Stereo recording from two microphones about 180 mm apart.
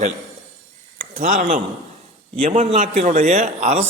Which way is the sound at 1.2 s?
45° right (ahead or behind).